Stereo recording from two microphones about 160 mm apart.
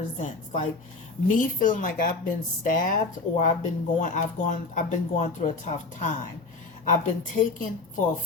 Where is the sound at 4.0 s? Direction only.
50° left (ahead or behind).